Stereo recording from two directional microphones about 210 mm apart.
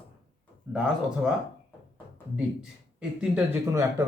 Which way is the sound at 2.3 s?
5° right (ahead or behind).